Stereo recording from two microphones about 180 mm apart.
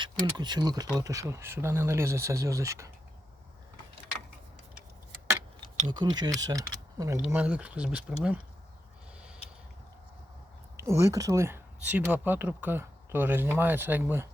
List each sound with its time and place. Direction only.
0.0 s speech: 25° right (ahead or behind)
5.5 s tick-tock: 40° right (ahead or behind)
5.9 s speech: 25° right (ahead or behind)
7.3 s speech: 5° right (ahead or behind)
10.8 s speech: 15° right (ahead or behind)